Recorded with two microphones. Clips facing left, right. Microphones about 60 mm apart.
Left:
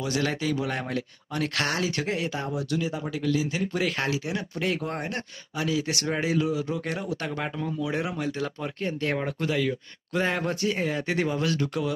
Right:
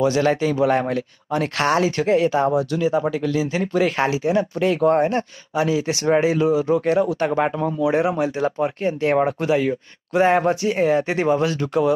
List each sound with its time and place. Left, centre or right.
0.0 s speech: right
7.8 s speech: right